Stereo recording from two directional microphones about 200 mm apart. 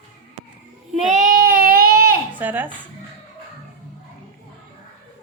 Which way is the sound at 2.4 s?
10° right (ahead or behind).